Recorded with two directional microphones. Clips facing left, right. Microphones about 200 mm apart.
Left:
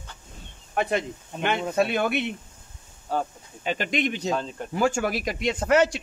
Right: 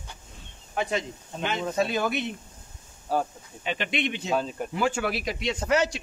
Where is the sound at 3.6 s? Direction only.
45° left (ahead or behind).